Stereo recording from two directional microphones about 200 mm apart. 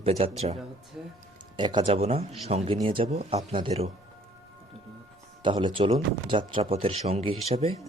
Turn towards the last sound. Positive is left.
turn(degrees=-30)  # may be behind; listen again after turning